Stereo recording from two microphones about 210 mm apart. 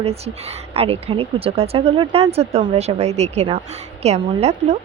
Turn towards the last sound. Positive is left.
turn(degrees=-30)  # may be behind; listen again after turning